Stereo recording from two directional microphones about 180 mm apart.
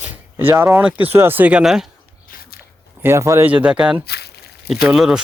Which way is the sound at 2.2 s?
55° left (ahead or behind).